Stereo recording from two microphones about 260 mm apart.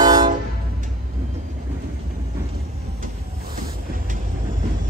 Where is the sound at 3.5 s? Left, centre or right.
Right.